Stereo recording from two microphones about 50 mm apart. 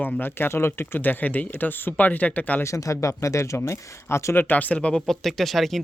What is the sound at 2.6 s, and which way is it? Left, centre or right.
Speech, left.